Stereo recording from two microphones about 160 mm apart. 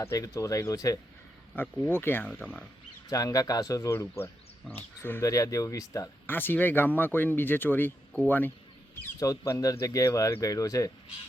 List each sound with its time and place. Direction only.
0.0 s speech: 20° left (ahead or behind)
1.5 s speech: 10° left (ahead or behind)
9.1 s speech: 20° left (ahead or behind)